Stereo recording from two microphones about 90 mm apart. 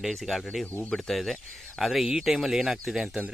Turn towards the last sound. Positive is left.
turn(degrees=-5)  # may be behind; listen again after turning